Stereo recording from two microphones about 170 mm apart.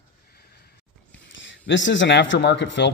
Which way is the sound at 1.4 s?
90° left.